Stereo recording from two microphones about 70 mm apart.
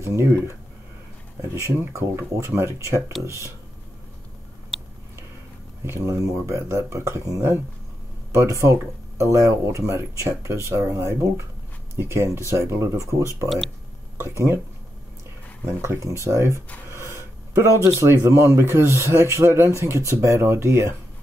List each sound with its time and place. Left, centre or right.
0.0 s speech: right
1.9 s speech: right
5.9 s speech: right
15.6 s speech: right